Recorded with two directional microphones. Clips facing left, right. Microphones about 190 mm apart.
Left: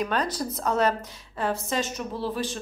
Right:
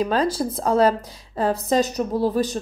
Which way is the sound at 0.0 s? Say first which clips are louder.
Right 6 dB; 30° right (ahead or behind).